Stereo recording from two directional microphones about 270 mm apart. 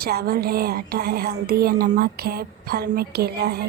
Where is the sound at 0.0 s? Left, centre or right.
Right.